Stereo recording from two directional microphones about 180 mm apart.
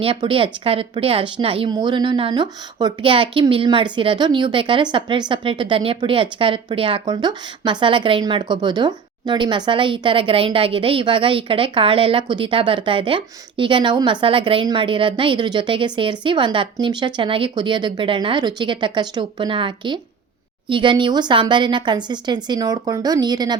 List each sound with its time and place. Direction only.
0.0 s speech: 30° right (ahead or behind)